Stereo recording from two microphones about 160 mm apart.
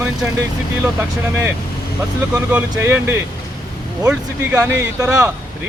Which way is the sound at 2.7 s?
15° right (ahead or behind).